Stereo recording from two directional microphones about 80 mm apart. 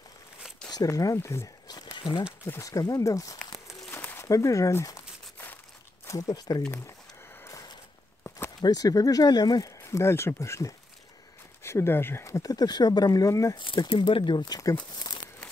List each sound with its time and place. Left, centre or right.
0.7 s speech: left
1.7 s a sound: left
2.6 s speech: left
6.0 s speech: left
8.5 s speech: left
9.8 s speech: left
13.9 s speech: left